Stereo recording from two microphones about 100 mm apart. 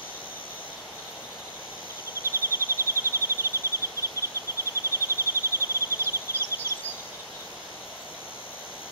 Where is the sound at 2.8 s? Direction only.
25° right (ahead or behind).